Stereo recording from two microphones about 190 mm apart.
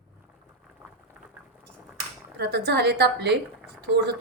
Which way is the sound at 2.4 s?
60° right (ahead or behind).